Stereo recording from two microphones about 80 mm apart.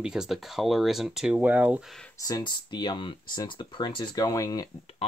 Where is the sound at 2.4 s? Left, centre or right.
Left.